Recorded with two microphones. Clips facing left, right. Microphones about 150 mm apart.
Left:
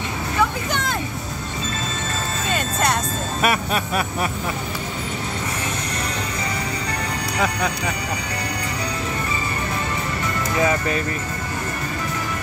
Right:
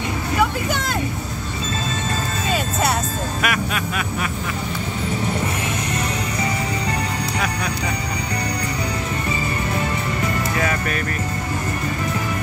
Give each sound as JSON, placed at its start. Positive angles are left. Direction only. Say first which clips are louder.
{"t": 2.5, "sound": "music", "louder": "right 1 dB", "side_deg": -5}
{"t": 3.4, "sound": "a sound", "louder": "left 4 dB", "side_deg": 35}
{"t": 10.6, "sound": "speech", "louder": "left 7 dB", "side_deg": 25}